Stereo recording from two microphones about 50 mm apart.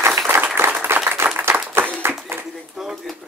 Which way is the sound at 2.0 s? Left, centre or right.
Right.